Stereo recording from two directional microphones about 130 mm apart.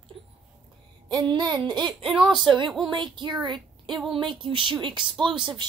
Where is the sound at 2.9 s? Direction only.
35° right (ahead or behind).